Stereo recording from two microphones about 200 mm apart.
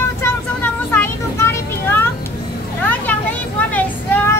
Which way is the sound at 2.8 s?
10° left (ahead or behind).